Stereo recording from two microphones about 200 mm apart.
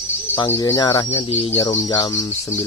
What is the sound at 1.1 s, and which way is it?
Speech, 30° left (ahead or behind).